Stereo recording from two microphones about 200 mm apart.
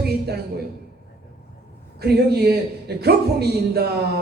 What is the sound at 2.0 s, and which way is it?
A woman's voice, 50° right (ahead or behind).